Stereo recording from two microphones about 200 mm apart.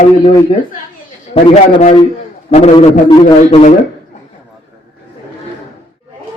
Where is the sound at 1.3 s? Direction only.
30° left (ahead or behind).